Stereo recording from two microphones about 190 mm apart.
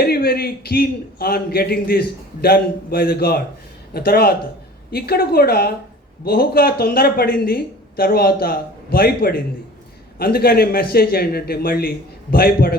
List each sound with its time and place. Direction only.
0.0 s a man's voice: 55° left (ahead or behind)